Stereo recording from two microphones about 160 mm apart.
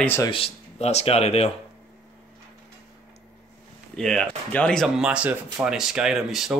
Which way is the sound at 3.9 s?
5° left (ahead or behind).